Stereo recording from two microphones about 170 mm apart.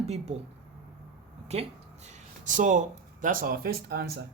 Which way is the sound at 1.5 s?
40° right (ahead or behind).